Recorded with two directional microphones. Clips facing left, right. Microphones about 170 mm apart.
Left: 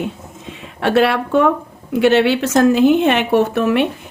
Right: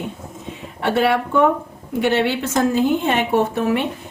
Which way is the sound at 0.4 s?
90° left.